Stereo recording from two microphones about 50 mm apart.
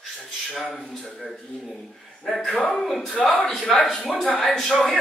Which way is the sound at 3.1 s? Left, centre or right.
Left.